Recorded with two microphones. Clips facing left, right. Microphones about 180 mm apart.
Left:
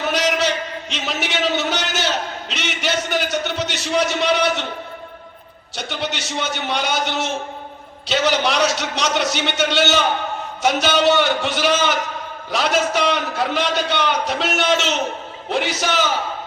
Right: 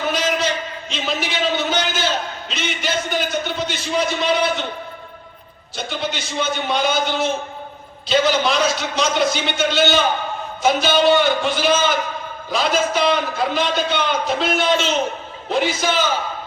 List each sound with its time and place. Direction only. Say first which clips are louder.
0.1 s a sound: left 2 dB; 75° left (ahead or behind)
2.5 s a man's voice: even; 70° left (ahead or behind)
5.7 s a man's voice: right 1 dB; 70° left (ahead or behind)